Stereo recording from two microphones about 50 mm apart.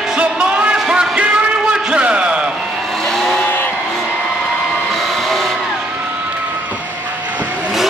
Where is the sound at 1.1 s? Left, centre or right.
Right.